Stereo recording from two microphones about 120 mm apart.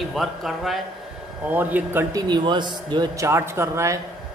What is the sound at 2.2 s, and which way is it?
Speech, 35° right (ahead or behind).